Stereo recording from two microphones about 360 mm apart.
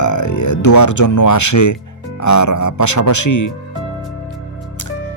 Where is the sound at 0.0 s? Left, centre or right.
Left.